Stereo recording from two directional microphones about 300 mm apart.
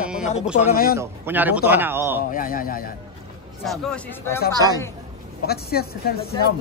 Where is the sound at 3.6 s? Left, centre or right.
Centre.